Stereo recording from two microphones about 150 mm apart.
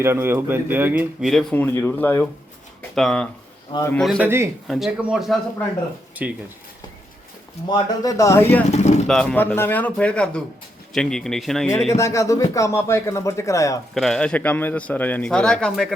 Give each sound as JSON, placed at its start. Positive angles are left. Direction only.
{"t": 0.0, "sound": "speech", "side_deg": -15}
{"t": 1.2, "sound": "a man's voice", "side_deg": 0}
{"t": 3.7, "sound": "a man's voice", "side_deg": 35}
{"t": 4.2, "sound": "speech", "side_deg": -15}
{"t": 7.7, "sound": "speech", "side_deg": 25}
{"t": 8.7, "sound": "speech", "side_deg": 50}
{"t": 9.0, "sound": "a man's voice", "side_deg": 5}
{"t": 11.9, "sound": "speech", "side_deg": 20}
{"t": 13.9, "sound": "a man's voice", "side_deg": 0}